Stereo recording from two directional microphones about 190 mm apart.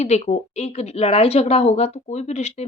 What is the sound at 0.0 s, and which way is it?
Speech, 35° left (ahead or behind).